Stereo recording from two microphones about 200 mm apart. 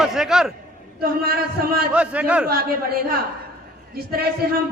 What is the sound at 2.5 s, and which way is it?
A man's voice, 50° right (ahead or behind).